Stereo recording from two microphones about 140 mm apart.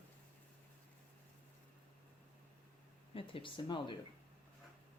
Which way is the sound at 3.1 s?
40° left (ahead or behind).